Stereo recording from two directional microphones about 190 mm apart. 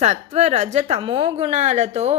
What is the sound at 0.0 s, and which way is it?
A woman's voice, 35° right (ahead or behind).